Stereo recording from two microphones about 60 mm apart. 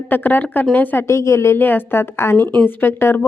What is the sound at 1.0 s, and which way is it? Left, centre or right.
A woman's voice, left.